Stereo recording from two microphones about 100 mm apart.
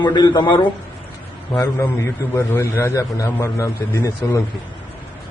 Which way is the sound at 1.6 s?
20° left (ahead or behind).